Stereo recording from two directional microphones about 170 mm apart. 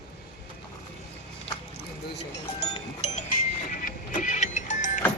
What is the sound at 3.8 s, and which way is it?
Vehicle, 50° left (ahead or behind).